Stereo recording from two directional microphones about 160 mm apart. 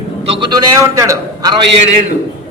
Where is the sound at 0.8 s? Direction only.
20° right (ahead or behind).